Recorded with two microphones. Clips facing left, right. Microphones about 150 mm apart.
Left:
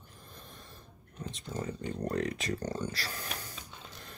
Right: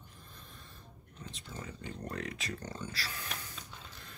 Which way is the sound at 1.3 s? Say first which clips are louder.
Left 8 dB; 40° left (ahead or behind).